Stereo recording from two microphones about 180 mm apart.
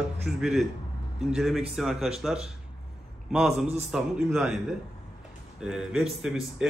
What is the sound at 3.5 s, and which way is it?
Speech, 35° right (ahead or behind).